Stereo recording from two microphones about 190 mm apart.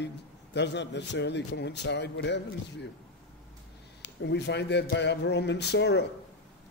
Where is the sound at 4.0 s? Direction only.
65° left (ahead or behind).